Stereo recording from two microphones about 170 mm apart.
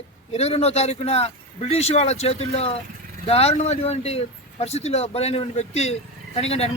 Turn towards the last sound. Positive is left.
turn(degrees=35)  # may be behind; listen again after turning